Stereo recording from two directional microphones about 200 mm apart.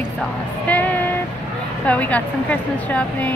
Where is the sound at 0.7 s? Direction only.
10° left (ahead or behind).